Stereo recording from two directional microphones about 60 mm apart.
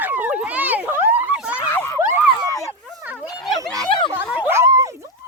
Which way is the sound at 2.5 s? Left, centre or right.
Left.